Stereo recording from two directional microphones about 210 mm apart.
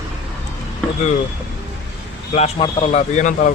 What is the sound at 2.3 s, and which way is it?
A man's voice, 30° left (ahead or behind).